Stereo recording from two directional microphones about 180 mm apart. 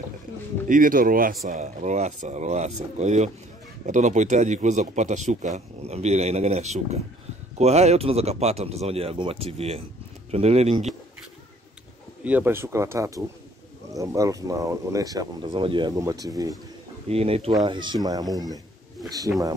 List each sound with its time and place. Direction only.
0.7 s a man's voice: 50° right (ahead or behind)
12.3 s speech: 10° right (ahead or behind)
17.1 s a man's voice: 35° right (ahead or behind)